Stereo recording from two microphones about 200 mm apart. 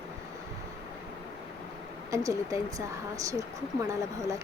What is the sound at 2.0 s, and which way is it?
Speech, 15° right (ahead or behind).